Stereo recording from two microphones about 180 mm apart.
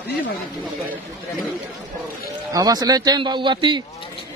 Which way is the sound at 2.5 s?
20° right (ahead or behind).